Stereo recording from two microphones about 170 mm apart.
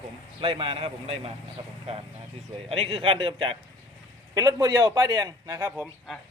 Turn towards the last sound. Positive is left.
turn(degrees=-15)  # may be behind; listen again after turning